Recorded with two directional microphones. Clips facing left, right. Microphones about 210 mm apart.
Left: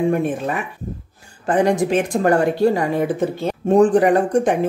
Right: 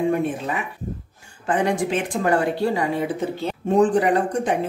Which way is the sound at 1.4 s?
40° left (ahead or behind).